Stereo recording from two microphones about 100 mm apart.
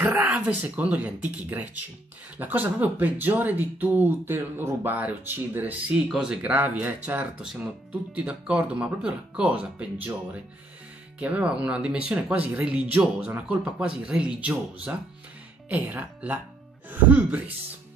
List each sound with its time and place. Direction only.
0.0 s speech: 15° right (ahead or behind)
11.1 s speech: 15° right (ahead or behind)